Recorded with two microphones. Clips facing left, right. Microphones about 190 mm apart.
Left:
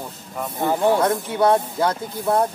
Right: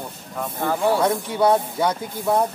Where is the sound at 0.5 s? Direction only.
15° left (ahead or behind).